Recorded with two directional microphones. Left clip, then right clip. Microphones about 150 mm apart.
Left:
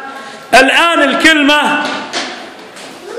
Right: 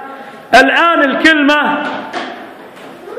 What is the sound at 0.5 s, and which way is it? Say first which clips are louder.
A man's voice: even; 15° left (ahead or behind).